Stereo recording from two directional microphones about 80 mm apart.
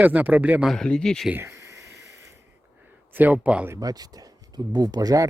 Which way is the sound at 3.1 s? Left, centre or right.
Right.